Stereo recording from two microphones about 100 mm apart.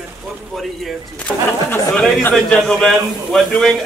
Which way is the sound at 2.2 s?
15° left (ahead or behind).